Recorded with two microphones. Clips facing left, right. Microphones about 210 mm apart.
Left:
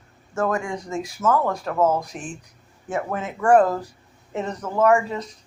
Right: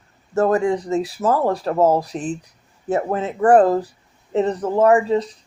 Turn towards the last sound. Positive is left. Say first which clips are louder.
# right 4 dB
turn(degrees=-35)  # may be behind; listen again after turning